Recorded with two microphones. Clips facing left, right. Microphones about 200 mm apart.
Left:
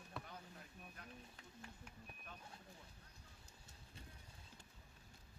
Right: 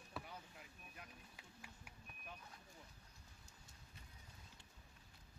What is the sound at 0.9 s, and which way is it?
Speech, 10° right (ahead or behind).